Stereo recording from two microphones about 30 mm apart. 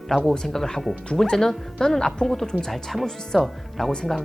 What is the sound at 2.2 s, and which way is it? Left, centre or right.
Speech, centre.